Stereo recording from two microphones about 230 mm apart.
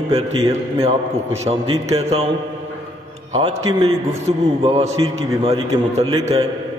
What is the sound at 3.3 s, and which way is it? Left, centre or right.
A man's voice, right.